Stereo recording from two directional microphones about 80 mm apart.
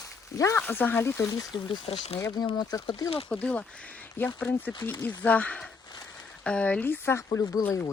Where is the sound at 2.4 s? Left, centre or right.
Left.